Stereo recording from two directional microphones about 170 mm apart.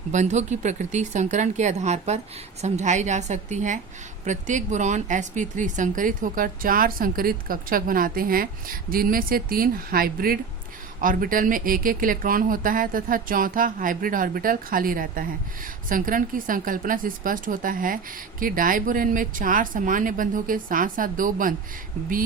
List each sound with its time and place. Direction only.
0.1 s speech: 45° right (ahead or behind)